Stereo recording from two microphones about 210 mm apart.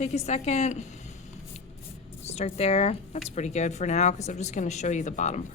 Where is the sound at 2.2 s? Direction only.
30° left (ahead or behind).